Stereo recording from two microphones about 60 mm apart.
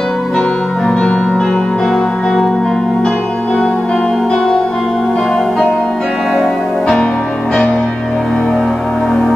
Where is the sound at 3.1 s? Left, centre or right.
Left.